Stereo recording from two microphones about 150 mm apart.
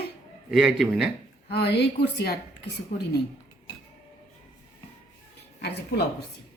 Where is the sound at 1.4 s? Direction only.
90° left.